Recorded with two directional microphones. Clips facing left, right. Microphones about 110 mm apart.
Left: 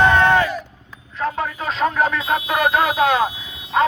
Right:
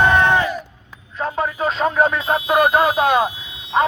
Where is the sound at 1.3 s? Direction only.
25° right (ahead or behind).